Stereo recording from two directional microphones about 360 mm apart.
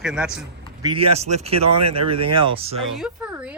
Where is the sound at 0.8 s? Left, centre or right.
Centre.